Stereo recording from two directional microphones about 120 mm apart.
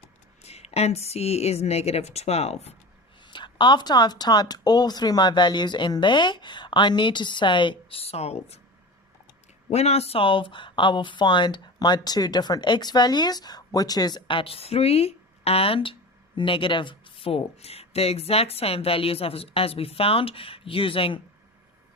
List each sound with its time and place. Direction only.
0.4 s speech: 60° left (ahead or behind)
3.2 s speech: 40° left (ahead or behind); by 8.6 s 60° left (ahead or behind)
9.6 s speech: 60° left (ahead or behind)